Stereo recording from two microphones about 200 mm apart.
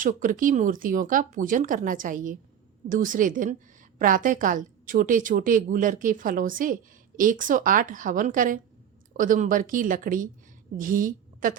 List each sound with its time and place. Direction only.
0.0 s a woman's voice: 40° right (ahead or behind)